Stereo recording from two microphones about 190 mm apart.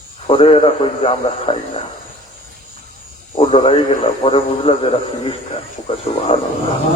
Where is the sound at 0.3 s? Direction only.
30° left (ahead or behind).